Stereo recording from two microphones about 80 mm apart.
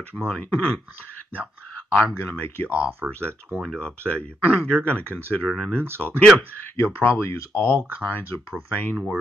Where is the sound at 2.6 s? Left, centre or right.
Right.